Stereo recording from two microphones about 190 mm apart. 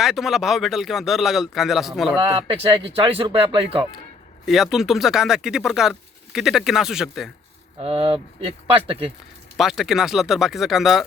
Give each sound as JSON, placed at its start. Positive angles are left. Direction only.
{"t": 0.0, "sound": "speech", "side_deg": 0}
{"t": 2.2, "sound": "speech", "side_deg": -25}
{"t": 4.4, "sound": "speech", "side_deg": 0}
{"t": 7.8, "sound": "speech", "side_deg": -30}
{"t": 9.6, "sound": "speech", "side_deg": 0}